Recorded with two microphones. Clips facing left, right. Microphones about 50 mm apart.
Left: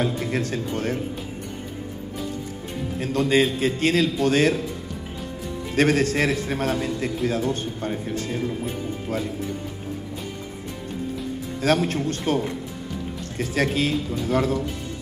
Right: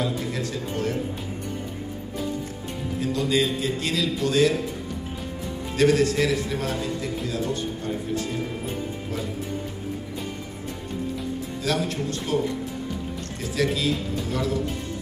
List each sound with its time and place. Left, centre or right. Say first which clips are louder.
0.0 s a man's voice: left 3 dB; left
3.0 s a man's voice: left 3 dB; left
5.8 s a man's voice: even; left
11.6 s a man's voice: left 5 dB; left